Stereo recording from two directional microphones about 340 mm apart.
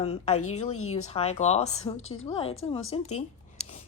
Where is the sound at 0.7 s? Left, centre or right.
Left.